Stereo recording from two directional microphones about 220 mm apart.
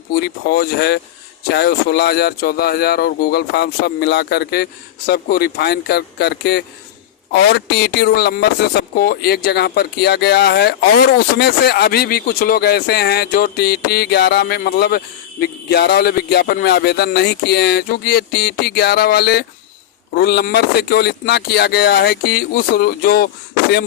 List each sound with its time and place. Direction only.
0.1 s speech: 45° left (ahead or behind)